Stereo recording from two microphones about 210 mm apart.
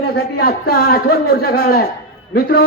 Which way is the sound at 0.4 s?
45° left (ahead or behind).